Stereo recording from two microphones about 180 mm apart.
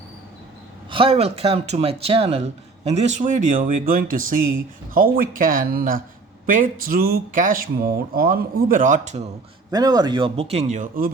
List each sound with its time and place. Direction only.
0.9 s speech: 30° right (ahead or behind)
9.7 s speech: 20° right (ahead or behind); by 11.1 s 50° right (ahead or behind)